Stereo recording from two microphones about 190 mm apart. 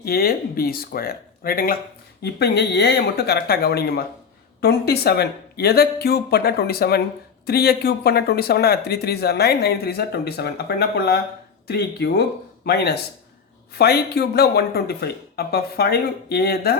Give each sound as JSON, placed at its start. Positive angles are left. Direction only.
{"t": 0.0, "sound": "speech", "side_deg": 55}